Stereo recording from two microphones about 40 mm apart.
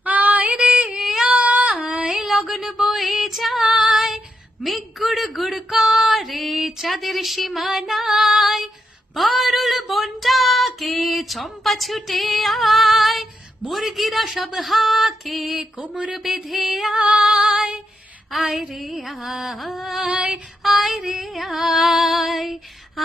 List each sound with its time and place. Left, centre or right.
0.0 s female singing: right
0.6 s music: right
1.2 s child singing: right
2.0 s a sound: centre
2.9 s female singing: centre
4.6 s speech: centre
9.1 s female singing: centre
13.7 s speech: centre
16.1 s a sound: centre
16.9 s female singing: right
18.3 s speech: centre
20.1 s female singing: right
20.6 s speech: centre